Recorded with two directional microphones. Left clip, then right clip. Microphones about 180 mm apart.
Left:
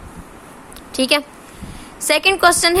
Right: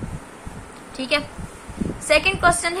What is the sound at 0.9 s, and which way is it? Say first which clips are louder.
A woman's voice: left 6 dB; 65° left (ahead or behind).